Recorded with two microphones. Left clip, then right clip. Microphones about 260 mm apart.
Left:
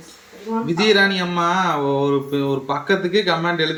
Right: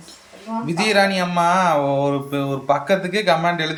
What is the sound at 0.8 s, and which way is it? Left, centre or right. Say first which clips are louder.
Speech: left 1 dB; centre.